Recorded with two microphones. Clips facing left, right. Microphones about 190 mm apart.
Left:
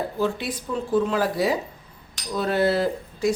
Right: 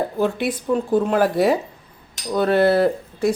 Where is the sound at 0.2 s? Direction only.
60° right (ahead or behind).